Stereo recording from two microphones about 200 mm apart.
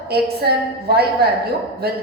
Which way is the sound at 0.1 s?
50° right (ahead or behind).